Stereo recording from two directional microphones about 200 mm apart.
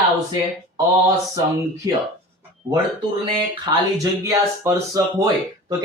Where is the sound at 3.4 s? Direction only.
20° right (ahead or behind).